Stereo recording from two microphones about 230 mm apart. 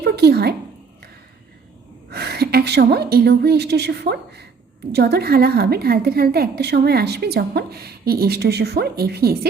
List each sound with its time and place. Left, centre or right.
0.0 s speech: right
2.0 s a woman's voice: right